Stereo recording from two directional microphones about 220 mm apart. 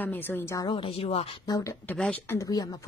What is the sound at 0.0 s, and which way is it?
A woman's voice, 10° left (ahead or behind).